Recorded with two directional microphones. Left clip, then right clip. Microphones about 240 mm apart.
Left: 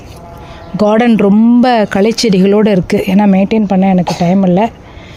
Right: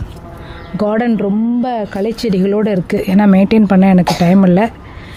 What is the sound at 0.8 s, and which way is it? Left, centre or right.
Speech, centre.